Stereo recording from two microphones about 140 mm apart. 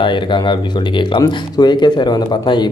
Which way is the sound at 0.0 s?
35° left (ahead or behind).